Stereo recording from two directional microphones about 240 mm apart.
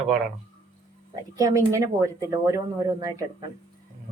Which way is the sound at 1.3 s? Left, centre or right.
Centre.